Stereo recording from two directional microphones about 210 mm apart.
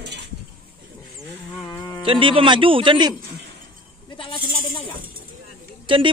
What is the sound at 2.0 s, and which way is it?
A man's voice, 25° right (ahead or behind).